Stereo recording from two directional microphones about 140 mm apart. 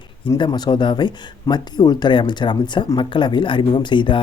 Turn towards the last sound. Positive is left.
turn(degrees=35)  # may be behind; listen again after turning